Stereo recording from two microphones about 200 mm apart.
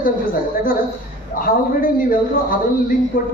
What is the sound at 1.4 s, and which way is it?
A man's voice, 45° left (ahead or behind).